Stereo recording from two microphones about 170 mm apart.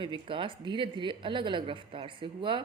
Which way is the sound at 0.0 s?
30° right (ahead or behind).